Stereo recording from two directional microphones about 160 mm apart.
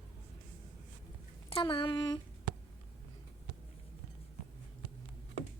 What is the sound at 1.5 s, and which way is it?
Speech, 30° left (ahead or behind).